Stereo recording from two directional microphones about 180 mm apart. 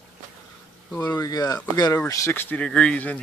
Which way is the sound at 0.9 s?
20° left (ahead or behind).